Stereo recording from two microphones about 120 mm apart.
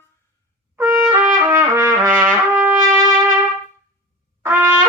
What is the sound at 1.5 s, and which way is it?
Trumpet, 25° right (ahead or behind).